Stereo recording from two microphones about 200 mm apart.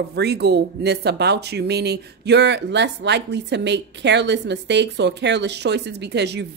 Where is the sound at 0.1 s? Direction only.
55° right (ahead or behind).